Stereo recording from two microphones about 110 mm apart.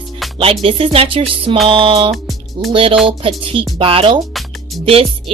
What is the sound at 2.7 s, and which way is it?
Music, 55° right (ahead or behind).